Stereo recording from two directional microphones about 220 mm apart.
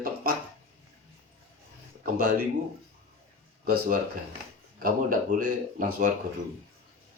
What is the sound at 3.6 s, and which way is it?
Speech, 45° right (ahead or behind).